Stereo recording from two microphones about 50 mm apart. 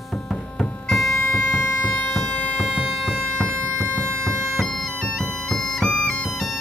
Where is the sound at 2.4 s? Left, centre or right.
Left.